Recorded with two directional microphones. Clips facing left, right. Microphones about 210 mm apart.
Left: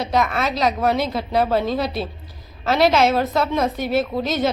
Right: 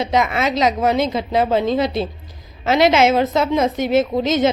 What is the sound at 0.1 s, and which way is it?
A woman's voice, 20° right (ahead or behind).